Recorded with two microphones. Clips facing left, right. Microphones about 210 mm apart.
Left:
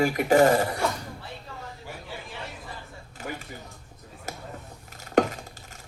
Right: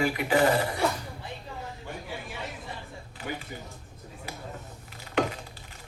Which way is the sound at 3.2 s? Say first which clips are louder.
Even; 45° left (ahead or behind).